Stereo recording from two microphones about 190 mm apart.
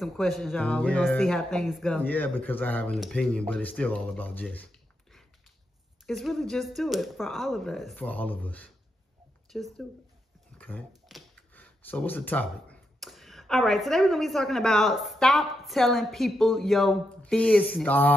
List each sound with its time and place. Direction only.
0.0 s speech: centre (ahead or behind)
6.0 s speech: centre (ahead or behind)
10.6 s a sound: 10° left (ahead or behind)
11.1 s speech: 5° left (ahead or behind)